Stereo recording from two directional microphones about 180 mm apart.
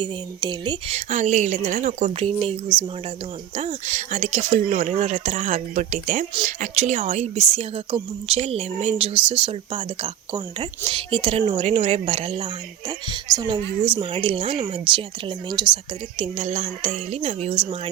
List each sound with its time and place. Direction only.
0.0 s speech: 25° right (ahead or behind)
0.9 s speech: 40° right (ahead or behind)